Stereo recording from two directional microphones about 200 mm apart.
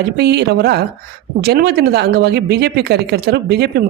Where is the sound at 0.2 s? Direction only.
55° right (ahead or behind).